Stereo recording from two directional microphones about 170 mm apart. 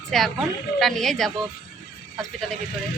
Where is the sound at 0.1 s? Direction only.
Centre (ahead or behind).